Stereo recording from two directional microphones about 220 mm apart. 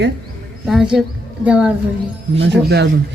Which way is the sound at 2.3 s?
50° right (ahead or behind).